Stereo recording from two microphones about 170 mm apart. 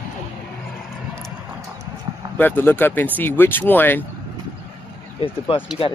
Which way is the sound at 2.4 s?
10° left (ahead or behind).